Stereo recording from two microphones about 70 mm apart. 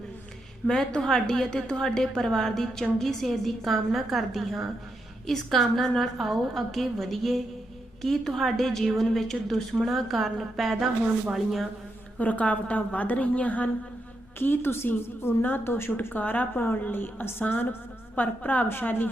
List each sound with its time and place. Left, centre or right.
0.7 s a woman's voice: centre
12.2 s a woman's voice: left
14.3 s a woman's voice: left